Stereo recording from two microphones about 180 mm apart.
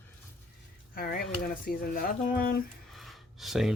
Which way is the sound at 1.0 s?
55° left (ahead or behind).